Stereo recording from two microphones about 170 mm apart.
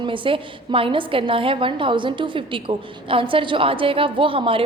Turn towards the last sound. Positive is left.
turn(degrees=-30)  # may be behind; listen again after turning